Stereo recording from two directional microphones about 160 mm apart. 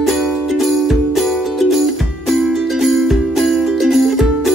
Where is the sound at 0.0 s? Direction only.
Centre (ahead or behind).